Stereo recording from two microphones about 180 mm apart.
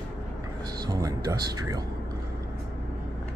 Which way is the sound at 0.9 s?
20° right (ahead or behind).